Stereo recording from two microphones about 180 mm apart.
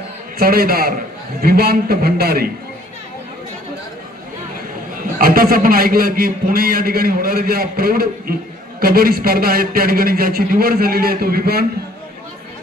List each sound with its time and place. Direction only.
0.4 s a man's voice: 55° right (ahead or behind)
5.2 s a man's voice: 55° right (ahead or behind)